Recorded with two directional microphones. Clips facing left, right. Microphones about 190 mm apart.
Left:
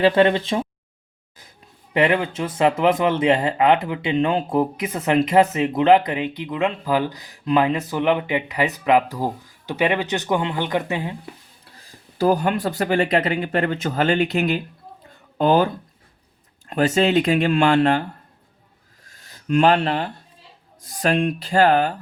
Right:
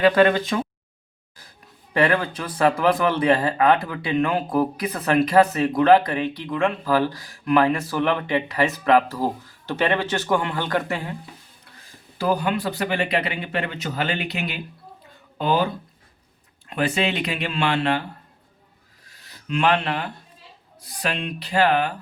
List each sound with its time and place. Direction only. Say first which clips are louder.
0.0 s speech: left 1 dB; 30° left (ahead or behind)
1.9 s speech: left 1 dB; 20° left (ahead or behind)
12.1 s speech: left 4 dB; 45° left (ahead or behind)
19.0 s a sound: left 7 dB; 45° left (ahead or behind)
20.8 s speech: left 8 dB; 45° left (ahead or behind)